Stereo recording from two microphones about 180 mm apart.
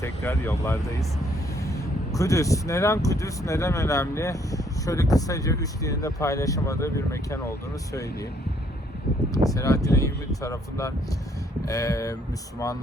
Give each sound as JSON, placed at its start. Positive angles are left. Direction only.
{"t": 0.0, "sound": "speech", "side_deg": 15}
{"t": 9.3, "sound": "speech", "side_deg": 20}